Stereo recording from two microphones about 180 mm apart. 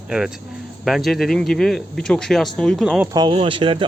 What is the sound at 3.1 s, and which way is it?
Speech, 30° right (ahead or behind).